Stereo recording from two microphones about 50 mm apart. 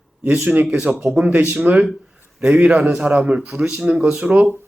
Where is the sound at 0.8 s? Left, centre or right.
Right.